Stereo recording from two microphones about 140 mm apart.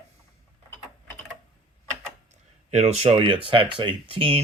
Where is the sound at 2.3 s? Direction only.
55° right (ahead or behind).